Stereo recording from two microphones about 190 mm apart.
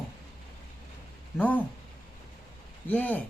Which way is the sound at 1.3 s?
10° left (ahead or behind).